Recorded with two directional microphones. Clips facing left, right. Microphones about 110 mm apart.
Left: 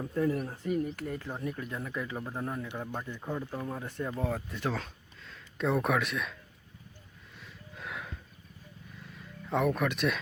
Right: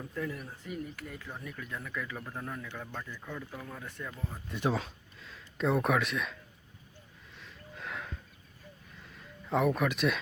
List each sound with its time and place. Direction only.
0.0 s speech: 35° left (ahead or behind)
4.2 s speech: 70° left (ahead or behind)
4.5 s speech: 15° right (ahead or behind)
4.8 s speech: centre (ahead or behind)
7.3 s snort: centre (ahead or behind)
9.0 s a sound: centre (ahead or behind)